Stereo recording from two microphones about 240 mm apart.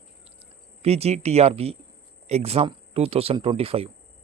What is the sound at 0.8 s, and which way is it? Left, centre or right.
Speech, right.